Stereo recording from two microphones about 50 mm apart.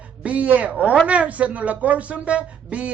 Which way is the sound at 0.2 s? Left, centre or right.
Right.